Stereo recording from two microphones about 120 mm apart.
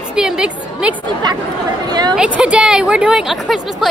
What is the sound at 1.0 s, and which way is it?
Speech, 35° right (ahead or behind).